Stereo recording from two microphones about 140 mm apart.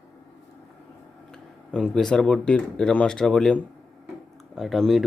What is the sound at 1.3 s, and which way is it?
Speech, 5° left (ahead or behind).